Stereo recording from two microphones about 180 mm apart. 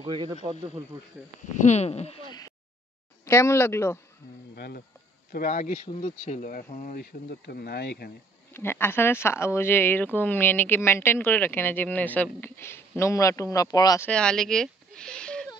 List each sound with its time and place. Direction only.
0.0 s speech: 25° right (ahead or behind)
1.6 s speech: 40° left (ahead or behind); by 4.0 s 15° left (ahead or behind)
4.6 s speech: 60° left (ahead or behind)
5.3 s speech: 50° left (ahead or behind)
8.5 s speech: 10° left (ahead or behind)